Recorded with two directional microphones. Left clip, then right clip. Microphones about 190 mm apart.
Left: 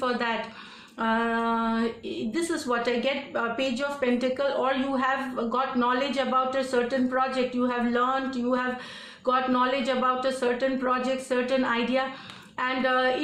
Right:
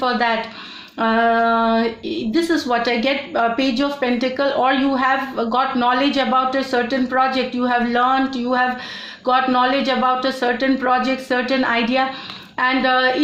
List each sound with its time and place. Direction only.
0.0 s speech: 35° right (ahead or behind)